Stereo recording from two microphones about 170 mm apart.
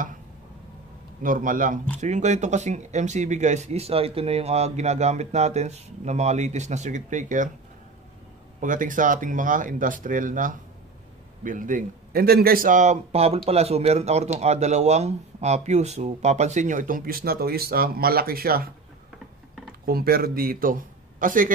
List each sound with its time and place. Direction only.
1.2 s speech: 50° right (ahead or behind)
8.5 s speech: 50° right (ahead or behind)
19.8 s speech: 60° right (ahead or behind)